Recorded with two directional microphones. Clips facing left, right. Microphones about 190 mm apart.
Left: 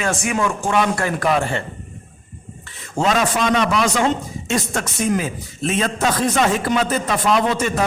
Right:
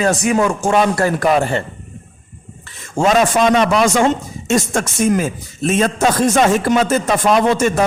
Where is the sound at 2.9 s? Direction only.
45° right (ahead or behind).